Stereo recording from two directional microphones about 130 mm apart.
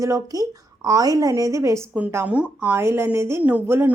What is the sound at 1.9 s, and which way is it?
A woman's voice, 10° right (ahead or behind).